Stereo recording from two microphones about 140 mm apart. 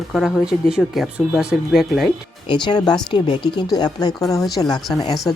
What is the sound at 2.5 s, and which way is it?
Speech, 30° left (ahead or behind).